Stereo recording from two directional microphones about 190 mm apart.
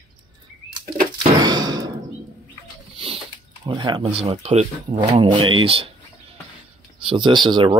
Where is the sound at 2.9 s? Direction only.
30° right (ahead or behind).